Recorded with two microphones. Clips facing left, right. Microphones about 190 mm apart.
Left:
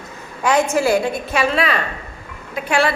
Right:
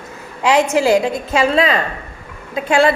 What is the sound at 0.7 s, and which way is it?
Speech, 90° right.